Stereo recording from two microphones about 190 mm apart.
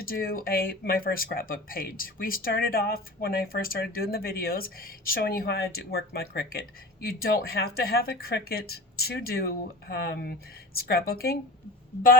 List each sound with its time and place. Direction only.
0.0 s speech: 50° left (ahead or behind)